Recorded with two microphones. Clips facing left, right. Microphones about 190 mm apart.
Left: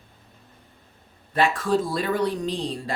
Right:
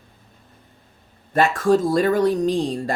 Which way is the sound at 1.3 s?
45° right (ahead or behind).